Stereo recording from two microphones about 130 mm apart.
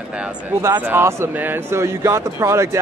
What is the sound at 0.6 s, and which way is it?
Speech, 20° right (ahead or behind).